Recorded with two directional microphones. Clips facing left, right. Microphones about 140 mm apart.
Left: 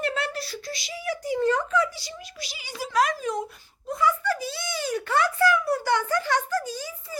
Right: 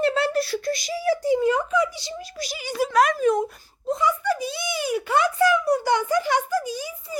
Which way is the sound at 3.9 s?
20° right (ahead or behind).